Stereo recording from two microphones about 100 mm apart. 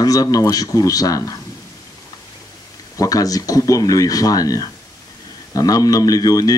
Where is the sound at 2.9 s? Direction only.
35° left (ahead or behind).